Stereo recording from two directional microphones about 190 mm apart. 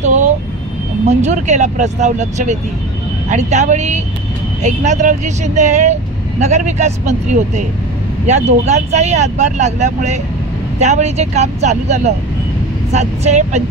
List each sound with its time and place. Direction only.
1.0 s speech: 35° right (ahead or behind)